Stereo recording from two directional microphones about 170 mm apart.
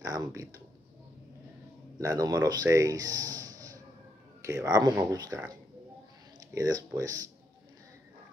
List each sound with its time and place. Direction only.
0.0 s speech: 20° right (ahead or behind)
2.0 s speech: 20° right (ahead or behind)
6.5 s speech: 20° right (ahead or behind)